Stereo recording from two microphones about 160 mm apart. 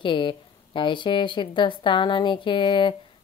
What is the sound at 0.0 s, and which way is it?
Speech, 30° left (ahead or behind).